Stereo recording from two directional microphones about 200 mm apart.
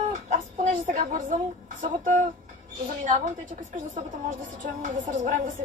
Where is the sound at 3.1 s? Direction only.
40° right (ahead or behind).